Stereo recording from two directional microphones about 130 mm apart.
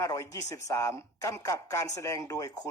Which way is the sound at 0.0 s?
25° left (ahead or behind).